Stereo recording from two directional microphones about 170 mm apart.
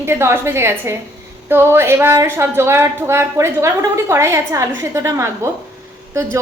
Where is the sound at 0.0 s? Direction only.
15° right (ahead or behind).